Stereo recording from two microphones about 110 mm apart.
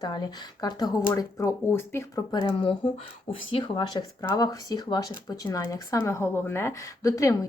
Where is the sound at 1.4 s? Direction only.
20° left (ahead or behind).